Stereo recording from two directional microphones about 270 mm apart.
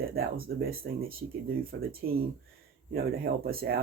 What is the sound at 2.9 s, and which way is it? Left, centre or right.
Speech, right.